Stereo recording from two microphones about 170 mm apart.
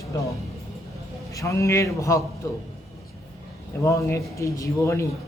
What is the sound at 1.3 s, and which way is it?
Speech, 15° left (ahead or behind).